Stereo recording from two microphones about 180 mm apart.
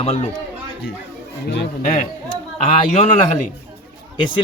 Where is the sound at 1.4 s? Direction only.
65° left (ahead or behind).